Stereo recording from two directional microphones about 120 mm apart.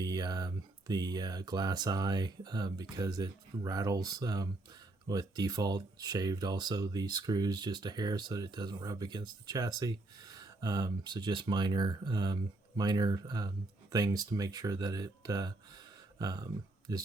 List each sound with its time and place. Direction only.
0.0 s speech: 30° right (ahead or behind)